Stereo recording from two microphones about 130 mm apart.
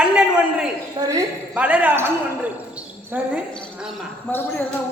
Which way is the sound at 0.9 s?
25° right (ahead or behind).